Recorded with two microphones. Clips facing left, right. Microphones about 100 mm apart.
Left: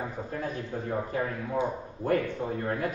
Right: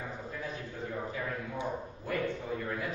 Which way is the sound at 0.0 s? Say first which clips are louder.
Left 6 dB; 50° left (ahead or behind).